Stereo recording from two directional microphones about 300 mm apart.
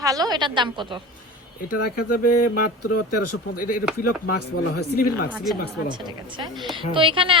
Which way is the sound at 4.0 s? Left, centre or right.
Left.